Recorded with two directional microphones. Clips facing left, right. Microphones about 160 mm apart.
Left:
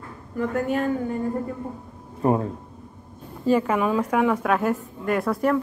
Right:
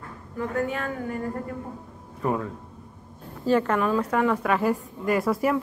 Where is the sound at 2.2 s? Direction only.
35° left (ahead or behind).